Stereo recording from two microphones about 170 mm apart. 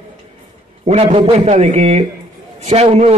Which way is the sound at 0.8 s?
40° right (ahead or behind).